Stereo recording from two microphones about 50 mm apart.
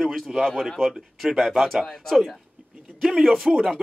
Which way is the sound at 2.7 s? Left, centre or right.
Right.